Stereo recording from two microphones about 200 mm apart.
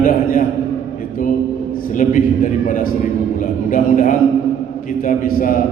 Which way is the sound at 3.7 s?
40° left (ahead or behind).